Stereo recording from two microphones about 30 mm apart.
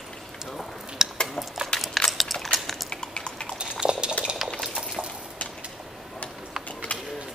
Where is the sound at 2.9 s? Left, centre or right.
Left.